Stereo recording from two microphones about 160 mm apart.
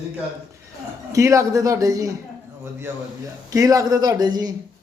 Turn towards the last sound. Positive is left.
turn(degrees=-25)  # may be behind; listen again after turning